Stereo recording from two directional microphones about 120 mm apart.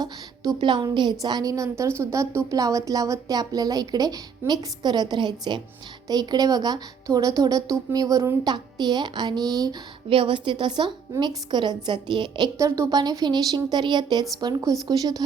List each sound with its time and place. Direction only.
0.0 s a woman's voice: 35° right (ahead or behind)
10.1 s a woman's voice: 45° right (ahead or behind)
12.5 s a woman's voice: 25° right (ahead or behind)